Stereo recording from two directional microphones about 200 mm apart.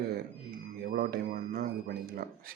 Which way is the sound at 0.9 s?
50° right (ahead or behind).